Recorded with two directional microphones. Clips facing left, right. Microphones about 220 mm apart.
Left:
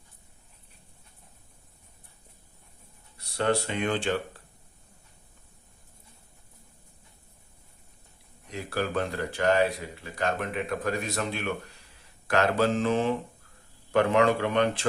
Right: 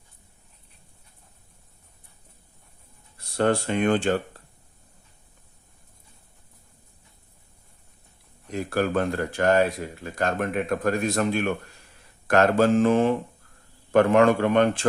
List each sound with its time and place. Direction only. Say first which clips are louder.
3.2 s speech: right 4 dB; 50° right (ahead or behind)
8.4 s speech: right 6 dB; 50° right (ahead or behind)